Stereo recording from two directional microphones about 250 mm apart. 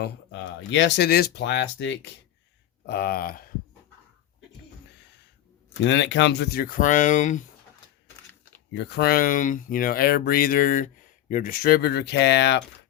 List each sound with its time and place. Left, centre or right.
0.0 s speech: left
5.8 s speech: left
8.0 s a sound: centre
8.7 s speech: left